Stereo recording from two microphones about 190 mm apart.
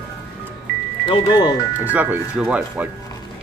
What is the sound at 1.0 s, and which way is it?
Speech, 25° left (ahead or behind).